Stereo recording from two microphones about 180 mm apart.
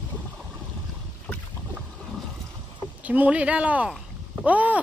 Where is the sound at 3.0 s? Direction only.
10° right (ahead or behind).